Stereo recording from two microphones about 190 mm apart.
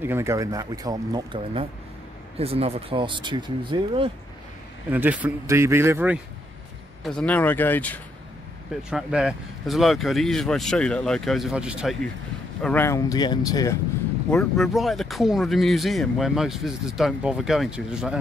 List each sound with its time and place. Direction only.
0.0 s speech: 15° right (ahead or behind)
4.8 s speech: 10° right (ahead or behind)
7.0 s speech: 5° left (ahead or behind)
8.9 s speech: 5° right (ahead or behind)
12.6 s speech: 10° left (ahead or behind)
14.3 s speech: centre (ahead or behind)